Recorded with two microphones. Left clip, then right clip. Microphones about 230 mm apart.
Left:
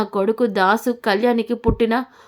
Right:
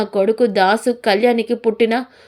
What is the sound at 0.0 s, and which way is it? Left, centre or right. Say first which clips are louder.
Speech: right 4 dB; centre.